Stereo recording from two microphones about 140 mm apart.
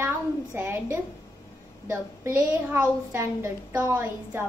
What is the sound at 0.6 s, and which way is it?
A woman's voice, 15° right (ahead or behind).